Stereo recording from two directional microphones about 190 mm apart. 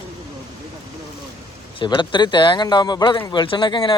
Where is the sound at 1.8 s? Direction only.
25° left (ahead or behind).